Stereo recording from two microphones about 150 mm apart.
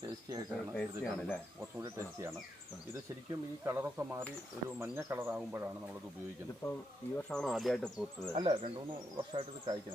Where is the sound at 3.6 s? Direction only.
15° right (ahead or behind).